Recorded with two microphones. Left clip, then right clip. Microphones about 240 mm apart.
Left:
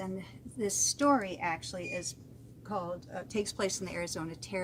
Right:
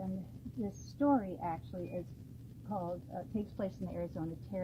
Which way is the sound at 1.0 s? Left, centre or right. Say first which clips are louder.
Left 2 dB; left.